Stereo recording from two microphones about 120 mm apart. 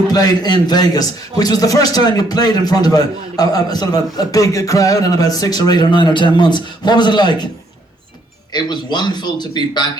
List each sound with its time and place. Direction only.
0.1 s a man's voice: 35° left (ahead or behind)
8.5 s a man's voice: 35° left (ahead or behind)